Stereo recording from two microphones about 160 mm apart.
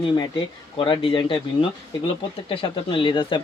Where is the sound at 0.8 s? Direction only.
30° left (ahead or behind).